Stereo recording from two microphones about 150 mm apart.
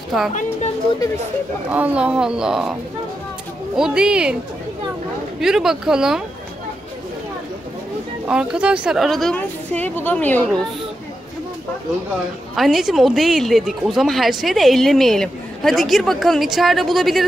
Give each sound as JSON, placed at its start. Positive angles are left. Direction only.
{"t": 0.3, "sound": "speech", "side_deg": 50}
{"t": 1.7, "sound": "speech", "side_deg": -10}
{"t": 5.4, "sound": "speech", "side_deg": -5}
{"t": 8.3, "sound": "speech", "side_deg": -5}
{"t": 12.5, "sound": "speech", "side_deg": 0}